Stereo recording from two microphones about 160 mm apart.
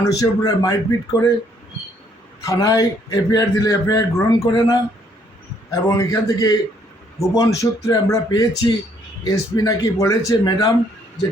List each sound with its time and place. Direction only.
0.0 s a man's voice: 25° left (ahead or behind)
2.5 s a man's voice: 20° left (ahead or behind)